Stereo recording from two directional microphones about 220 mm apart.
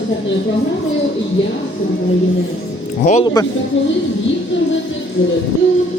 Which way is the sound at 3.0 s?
30° left (ahead or behind).